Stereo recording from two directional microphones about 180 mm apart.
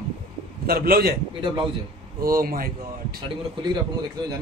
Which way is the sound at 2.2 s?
55° right (ahead or behind).